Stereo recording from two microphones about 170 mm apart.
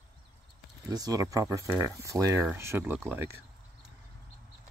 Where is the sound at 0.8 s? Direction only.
20° right (ahead or behind).